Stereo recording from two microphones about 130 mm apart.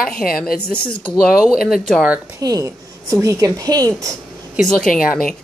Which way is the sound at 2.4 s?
25° right (ahead or behind).